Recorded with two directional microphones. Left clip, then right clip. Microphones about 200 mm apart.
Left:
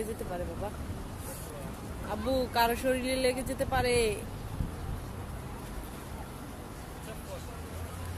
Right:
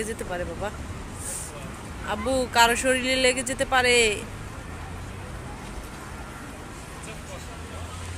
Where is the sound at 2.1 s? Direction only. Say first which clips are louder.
Right 6 dB; 5° right (ahead or behind).